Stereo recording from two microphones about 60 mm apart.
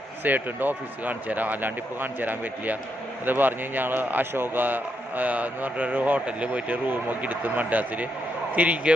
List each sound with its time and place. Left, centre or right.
0.3 s a man's voice: right